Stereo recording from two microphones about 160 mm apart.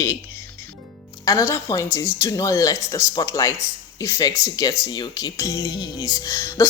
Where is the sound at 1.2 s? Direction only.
20° left (ahead or behind).